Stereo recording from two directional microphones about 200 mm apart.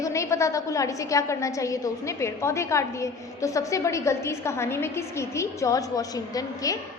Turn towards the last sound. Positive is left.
turn(degrees=15)  # may be behind; listen again after turning